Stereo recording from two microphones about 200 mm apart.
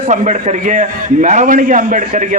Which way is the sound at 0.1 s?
35° right (ahead or behind).